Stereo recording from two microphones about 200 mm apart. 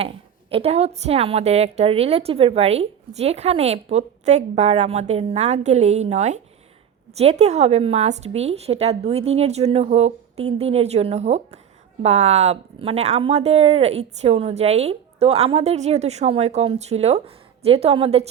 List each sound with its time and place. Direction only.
0.5 s speech: 30° right (ahead or behind)